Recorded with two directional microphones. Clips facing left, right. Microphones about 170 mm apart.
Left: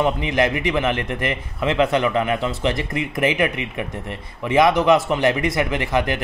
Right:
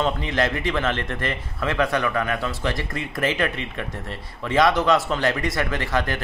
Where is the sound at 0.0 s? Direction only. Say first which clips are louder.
Left 4 dB; 15° left (ahead or behind).